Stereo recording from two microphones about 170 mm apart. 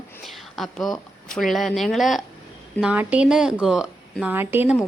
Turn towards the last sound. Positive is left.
turn(degrees=-10)  # may be behind; listen again after turning